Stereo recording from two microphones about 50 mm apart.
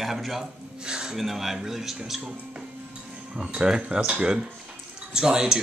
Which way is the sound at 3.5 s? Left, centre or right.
Right.